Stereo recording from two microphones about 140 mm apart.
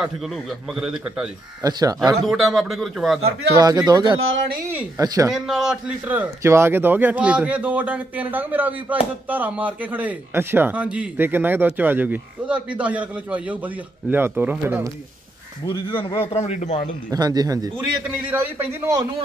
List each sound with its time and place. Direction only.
0.7 s a man's voice: 5° right (ahead or behind)
1.6 s speech: 25° right (ahead or behind)
2.2 s a man's voice: centre (ahead or behind)
3.5 s speech: 30° right (ahead or behind)
4.6 s a man's voice: 15° right (ahead or behind)
5.0 s speech: 25° right (ahead or behind)
5.3 s a man's voice: 5° right (ahead or behind)
15.6 s a man's voice: 35° left (ahead or behind); by 16.8 s 55° left (ahead or behind)
17.1 s speech: 30° right (ahead or behind)
18.0 s a man's voice: 15° right (ahead or behind)